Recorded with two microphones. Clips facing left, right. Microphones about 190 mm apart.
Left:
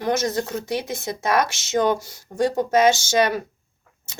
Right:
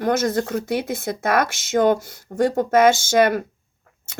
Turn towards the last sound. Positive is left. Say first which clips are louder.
# right 3 dB
turn(degrees=-50)  # may be behind; listen again after turning